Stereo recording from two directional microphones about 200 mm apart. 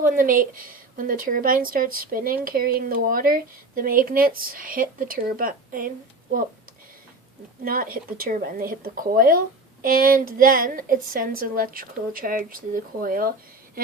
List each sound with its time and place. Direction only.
0.0 s a woman's voice: 45° right (ahead or behind)
7.6 s a woman's voice: 45° right (ahead or behind)